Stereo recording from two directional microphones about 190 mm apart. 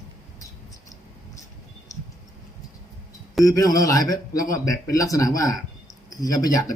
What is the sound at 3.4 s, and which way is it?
A man's voice, 20° left (ahead or behind).